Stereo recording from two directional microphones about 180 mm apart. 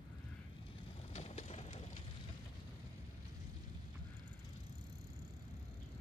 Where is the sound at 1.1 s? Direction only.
35° left (ahead or behind).